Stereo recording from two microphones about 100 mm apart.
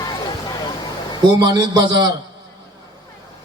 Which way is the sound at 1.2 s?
50° right (ahead or behind).